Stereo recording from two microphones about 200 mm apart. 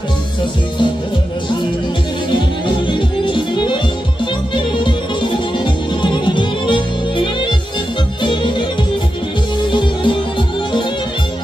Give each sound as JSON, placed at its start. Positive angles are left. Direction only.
{"t": 2.9, "sound": "music", "side_deg": 25}
{"t": 9.7, "sound": "music", "side_deg": 25}